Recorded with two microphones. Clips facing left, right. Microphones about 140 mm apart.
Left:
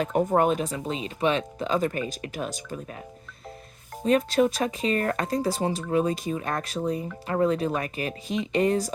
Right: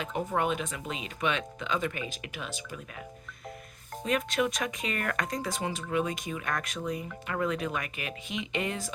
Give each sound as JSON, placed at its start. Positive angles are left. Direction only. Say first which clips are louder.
{"t": 0.0, "sound": "speech", "louder": "left 8 dB", "side_deg": 45}
{"t": 4.0, "sound": "speech", "louder": "left 7 dB", "side_deg": 35}